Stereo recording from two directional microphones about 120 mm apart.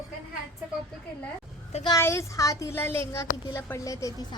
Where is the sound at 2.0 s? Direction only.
25° left (ahead or behind).